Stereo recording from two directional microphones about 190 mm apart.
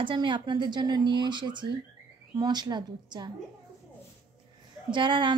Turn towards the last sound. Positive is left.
turn(degrees=-25)  # may be behind; listen again after turning